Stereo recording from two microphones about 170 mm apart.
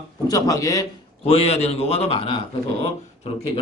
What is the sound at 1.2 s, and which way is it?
Speech, 35° left (ahead or behind).